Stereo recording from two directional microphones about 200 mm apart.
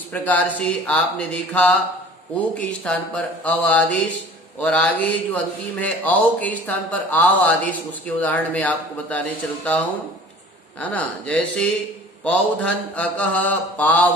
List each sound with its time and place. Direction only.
0.1 s speech: 10° left (ahead or behind)